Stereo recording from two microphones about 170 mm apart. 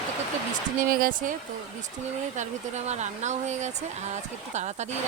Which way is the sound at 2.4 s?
40° right (ahead or behind).